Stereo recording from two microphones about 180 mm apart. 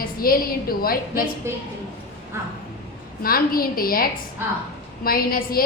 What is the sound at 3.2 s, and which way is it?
A woman's voice, 55° left (ahead or behind).